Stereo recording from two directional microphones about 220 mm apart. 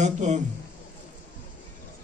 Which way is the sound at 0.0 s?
30° right (ahead or behind).